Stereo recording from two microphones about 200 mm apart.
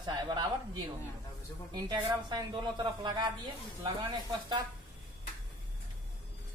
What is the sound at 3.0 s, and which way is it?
Speech, 20° right (ahead or behind).